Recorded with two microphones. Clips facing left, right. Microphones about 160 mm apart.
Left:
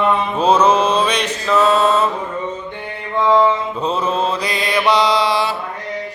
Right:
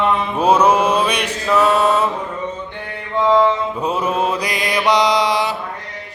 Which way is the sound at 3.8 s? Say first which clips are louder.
Left 1 dB; 10° right (ahead or behind).